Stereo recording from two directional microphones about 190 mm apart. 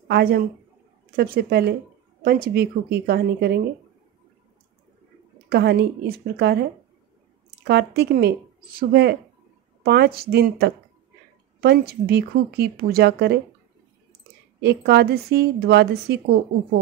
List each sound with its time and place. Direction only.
0.1 s speech: 55° right (ahead or behind)
5.5 s speech: 60° right (ahead or behind)
7.6 s speech: 60° right (ahead or behind)
14.6 s speech: 60° right (ahead or behind)